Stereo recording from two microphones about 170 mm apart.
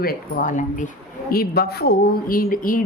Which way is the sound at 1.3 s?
65° left (ahead or behind).